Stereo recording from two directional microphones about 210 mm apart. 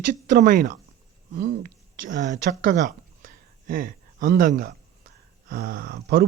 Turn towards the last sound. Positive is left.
turn(degrees=-45)  # may be behind; listen again after turning